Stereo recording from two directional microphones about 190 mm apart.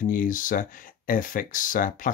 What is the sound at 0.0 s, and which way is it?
Speech, 45° left (ahead or behind).